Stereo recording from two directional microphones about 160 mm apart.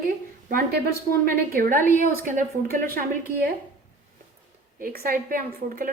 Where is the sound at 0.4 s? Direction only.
60° right (ahead or behind).